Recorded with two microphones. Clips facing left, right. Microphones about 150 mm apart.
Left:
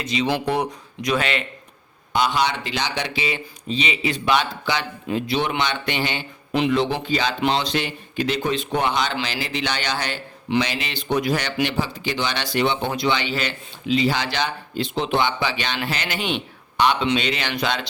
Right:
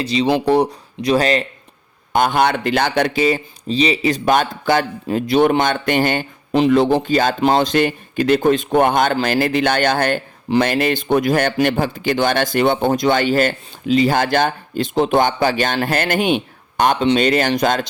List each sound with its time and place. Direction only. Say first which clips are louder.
0.0 s speech: right 6 dB; 35° right (ahead or behind)
2.1 s speech: right 5 dB; 50° right (ahead or behind)